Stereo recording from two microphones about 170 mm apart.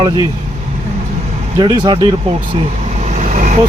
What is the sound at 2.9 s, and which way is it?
Vehicle, 45° right (ahead or behind).